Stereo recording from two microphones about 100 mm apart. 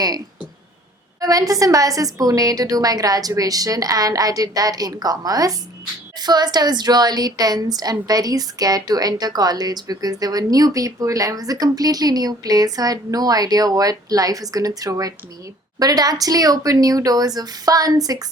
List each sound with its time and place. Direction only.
1.2 s a woman's voice: 35° right (ahead or behind)